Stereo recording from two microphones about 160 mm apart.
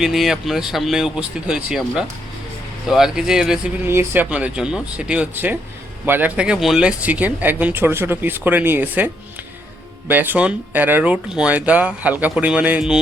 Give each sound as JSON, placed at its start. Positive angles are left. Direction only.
{"t": 0.0, "sound": "speech", "side_deg": 0}
{"t": 10.1, "sound": "speech", "side_deg": -10}